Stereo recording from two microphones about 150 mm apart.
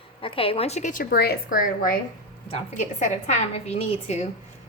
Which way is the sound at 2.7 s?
50° left (ahead or behind).